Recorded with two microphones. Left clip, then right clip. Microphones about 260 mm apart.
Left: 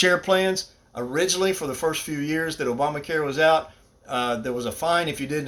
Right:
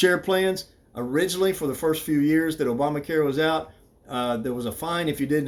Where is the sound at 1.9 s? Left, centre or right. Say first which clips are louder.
Right 4 dB; left.